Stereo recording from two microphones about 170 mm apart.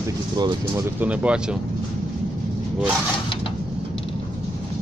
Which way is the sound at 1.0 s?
5° right (ahead or behind).